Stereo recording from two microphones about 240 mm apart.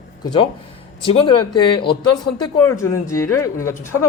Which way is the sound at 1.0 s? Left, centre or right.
Left.